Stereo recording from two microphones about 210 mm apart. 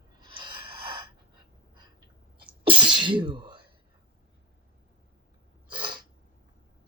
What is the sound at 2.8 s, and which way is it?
Sneeze, 20° right (ahead or behind).